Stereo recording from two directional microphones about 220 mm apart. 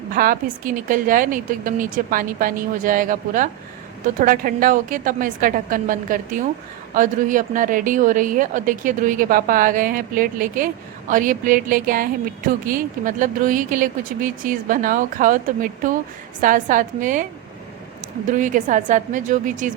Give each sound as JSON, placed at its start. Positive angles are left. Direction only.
{"t": 0.1, "sound": "a woman's voice", "side_deg": -40}
{"t": 18.3, "sound": "a woman's voice", "side_deg": -35}